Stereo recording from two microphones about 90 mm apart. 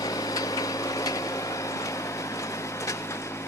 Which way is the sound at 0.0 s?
40° left (ahead or behind).